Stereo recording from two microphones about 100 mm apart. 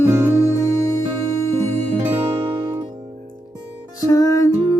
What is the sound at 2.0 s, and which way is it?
Music, 20° right (ahead or behind).